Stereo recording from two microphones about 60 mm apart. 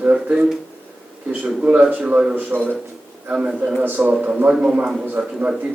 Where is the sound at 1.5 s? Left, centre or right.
Centre.